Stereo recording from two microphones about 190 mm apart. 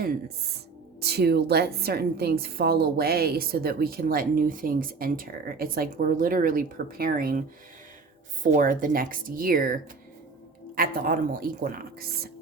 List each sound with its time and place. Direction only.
1.0 s a woman's voice: 60° right (ahead or behind)
8.5 s a woman's voice: 45° right (ahead or behind)
10.8 s a woman's voice: 50° right (ahead or behind)